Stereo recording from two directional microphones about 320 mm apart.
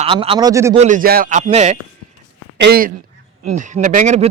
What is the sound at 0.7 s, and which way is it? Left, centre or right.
Speech, right.